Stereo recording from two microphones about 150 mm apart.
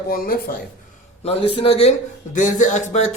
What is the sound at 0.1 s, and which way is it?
Speech, 75° left (ahead or behind).